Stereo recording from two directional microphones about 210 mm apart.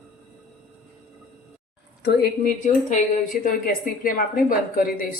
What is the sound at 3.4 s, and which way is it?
A woman's voice, 45° left (ahead or behind).